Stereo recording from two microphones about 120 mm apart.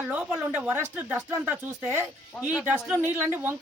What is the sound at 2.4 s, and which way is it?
A woman's voice, 10° right (ahead or behind).